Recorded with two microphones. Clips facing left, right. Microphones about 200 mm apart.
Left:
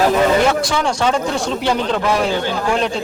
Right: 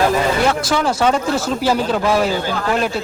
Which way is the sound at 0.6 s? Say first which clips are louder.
Right 1 dB; centre (ahead or behind).